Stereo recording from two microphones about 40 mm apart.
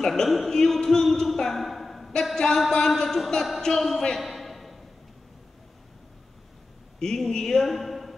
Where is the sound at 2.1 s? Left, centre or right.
Centre.